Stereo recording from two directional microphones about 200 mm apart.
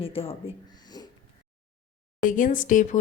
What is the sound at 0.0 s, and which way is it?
Speech, 30° left (ahead or behind).